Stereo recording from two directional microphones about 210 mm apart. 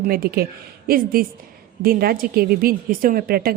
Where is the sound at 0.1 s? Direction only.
45° right (ahead or behind).